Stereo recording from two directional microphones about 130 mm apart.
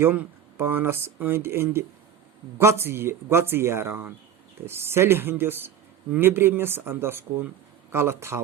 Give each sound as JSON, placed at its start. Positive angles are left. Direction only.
{"t": 0.0, "sound": "speech", "side_deg": -15}